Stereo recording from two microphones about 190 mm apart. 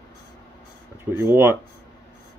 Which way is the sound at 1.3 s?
10° right (ahead or behind).